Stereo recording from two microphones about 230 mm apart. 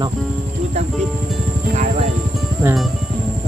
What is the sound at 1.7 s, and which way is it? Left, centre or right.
Music, right.